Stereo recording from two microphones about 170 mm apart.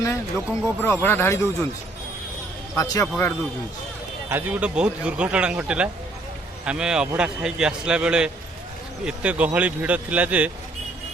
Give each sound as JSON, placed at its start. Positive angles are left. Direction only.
{"t": 0.0, "sound": "speech", "side_deg": 15}
{"t": 2.7, "sound": "speech", "side_deg": 20}
{"t": 4.3, "sound": "a man's voice", "side_deg": -10}